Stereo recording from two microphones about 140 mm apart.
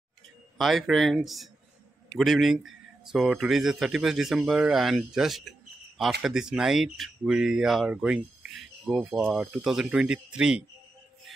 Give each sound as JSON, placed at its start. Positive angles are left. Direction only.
{"t": 0.6, "sound": "speech", "side_deg": 0}